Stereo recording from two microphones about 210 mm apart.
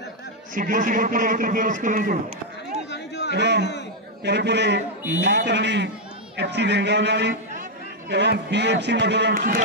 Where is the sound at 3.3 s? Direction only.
55° right (ahead or behind).